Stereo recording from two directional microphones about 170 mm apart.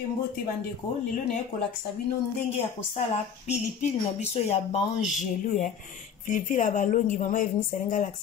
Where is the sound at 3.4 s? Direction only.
40° left (ahead or behind).